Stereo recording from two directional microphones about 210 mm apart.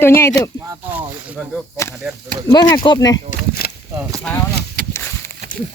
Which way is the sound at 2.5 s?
20° left (ahead or behind).